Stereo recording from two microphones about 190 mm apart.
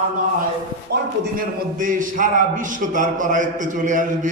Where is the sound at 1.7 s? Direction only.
45° right (ahead or behind).